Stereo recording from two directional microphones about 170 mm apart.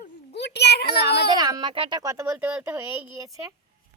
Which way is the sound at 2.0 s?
15° right (ahead or behind).